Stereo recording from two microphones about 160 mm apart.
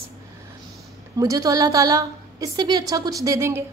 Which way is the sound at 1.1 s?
20° right (ahead or behind).